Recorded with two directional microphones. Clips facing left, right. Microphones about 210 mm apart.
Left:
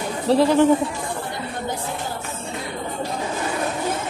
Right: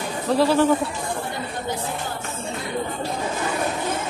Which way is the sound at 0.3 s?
20° left (ahead or behind).